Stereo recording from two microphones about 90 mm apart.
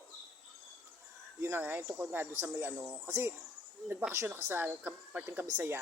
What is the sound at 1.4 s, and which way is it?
Speech, 20° right (ahead or behind).